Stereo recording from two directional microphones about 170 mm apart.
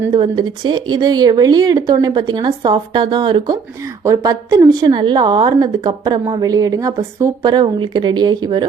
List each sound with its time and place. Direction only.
0.2 s a woman's voice: 25° right (ahead or behind)